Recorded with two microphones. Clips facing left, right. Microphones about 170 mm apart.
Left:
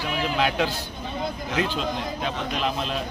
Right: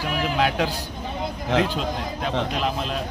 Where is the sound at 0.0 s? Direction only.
5° right (ahead or behind).